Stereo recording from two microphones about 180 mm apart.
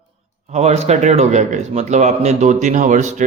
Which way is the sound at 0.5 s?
40° right (ahead or behind).